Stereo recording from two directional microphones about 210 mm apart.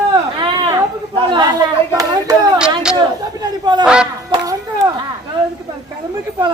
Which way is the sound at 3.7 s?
20° right (ahead or behind).